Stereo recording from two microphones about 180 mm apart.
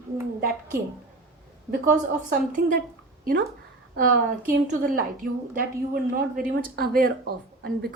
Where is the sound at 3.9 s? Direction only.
50° right (ahead or behind).